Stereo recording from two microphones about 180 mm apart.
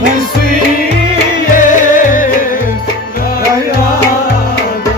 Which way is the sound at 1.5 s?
45° left (ahead or behind).